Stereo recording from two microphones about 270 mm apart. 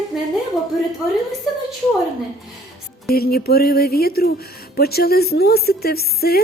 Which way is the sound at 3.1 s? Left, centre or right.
Left.